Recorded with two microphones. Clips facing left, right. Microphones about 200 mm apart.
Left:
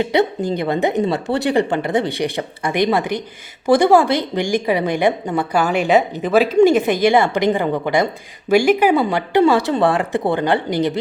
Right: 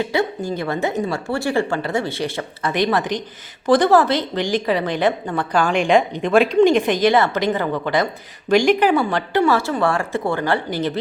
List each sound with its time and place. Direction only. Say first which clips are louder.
0.0 s a woman's voice: left 4 dB; 20° left (ahead or behind)